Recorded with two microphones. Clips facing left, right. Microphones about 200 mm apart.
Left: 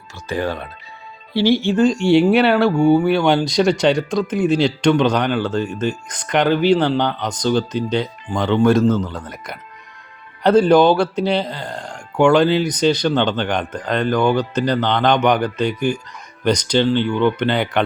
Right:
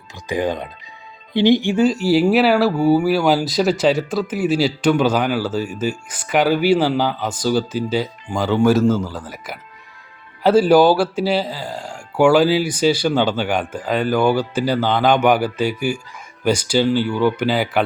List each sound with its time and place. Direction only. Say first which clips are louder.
0.3 s speech: right 2 dB; 15° right (ahead or behind)